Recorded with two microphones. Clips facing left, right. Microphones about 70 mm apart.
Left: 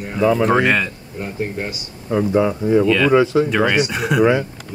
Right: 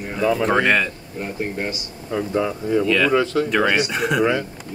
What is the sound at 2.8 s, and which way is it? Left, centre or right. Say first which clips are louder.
Speech: left 1 dB; centre.